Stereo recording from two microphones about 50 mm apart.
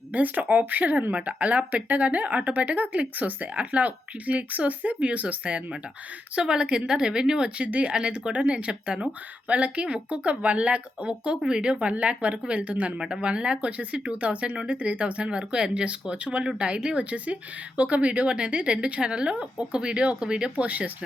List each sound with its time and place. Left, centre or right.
0.1 s speech: right
6.3 s a woman's voice: centre